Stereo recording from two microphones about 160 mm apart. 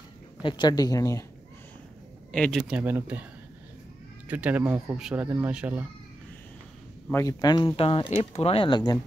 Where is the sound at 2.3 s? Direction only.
5° left (ahead or behind).